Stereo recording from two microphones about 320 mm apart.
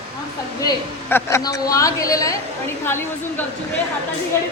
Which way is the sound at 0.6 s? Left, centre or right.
Centre.